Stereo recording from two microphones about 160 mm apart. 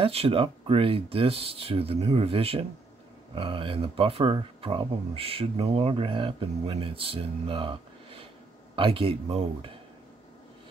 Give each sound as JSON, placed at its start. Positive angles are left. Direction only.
{"t": 0.0, "sound": "speech", "side_deg": -35}